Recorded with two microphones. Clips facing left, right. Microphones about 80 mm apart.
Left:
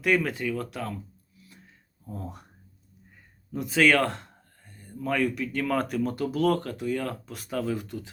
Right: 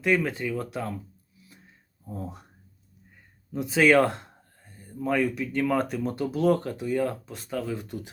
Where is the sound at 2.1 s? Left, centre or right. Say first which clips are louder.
Right 2 dB; centre.